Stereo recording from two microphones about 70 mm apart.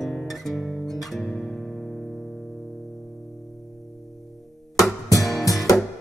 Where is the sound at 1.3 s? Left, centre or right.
Centre.